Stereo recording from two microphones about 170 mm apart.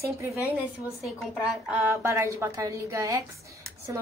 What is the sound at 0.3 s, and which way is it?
A woman's voice, 10° right (ahead or behind).